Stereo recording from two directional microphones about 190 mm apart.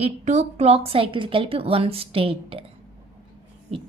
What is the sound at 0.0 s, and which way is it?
Speech, 35° right (ahead or behind).